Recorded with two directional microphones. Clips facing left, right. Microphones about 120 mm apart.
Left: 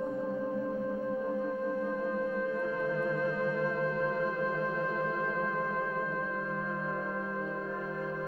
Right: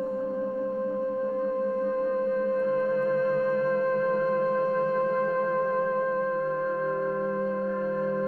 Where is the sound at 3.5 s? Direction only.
40° right (ahead or behind).